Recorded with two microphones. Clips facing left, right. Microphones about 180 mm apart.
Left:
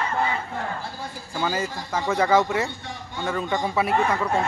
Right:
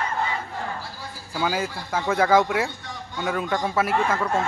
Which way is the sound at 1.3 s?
5° right (ahead or behind).